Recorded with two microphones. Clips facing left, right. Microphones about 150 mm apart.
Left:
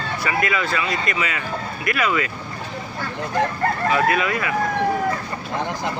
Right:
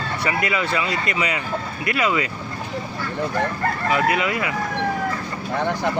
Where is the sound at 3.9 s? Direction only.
20° right (ahead or behind).